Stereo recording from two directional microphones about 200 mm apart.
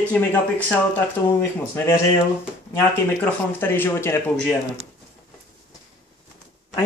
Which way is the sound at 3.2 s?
10° left (ahead or behind).